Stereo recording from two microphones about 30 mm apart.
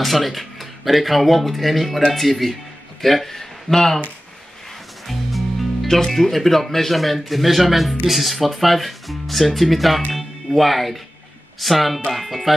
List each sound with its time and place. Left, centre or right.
0.0 s speech: centre
5.0 s music: centre
5.9 s speech: centre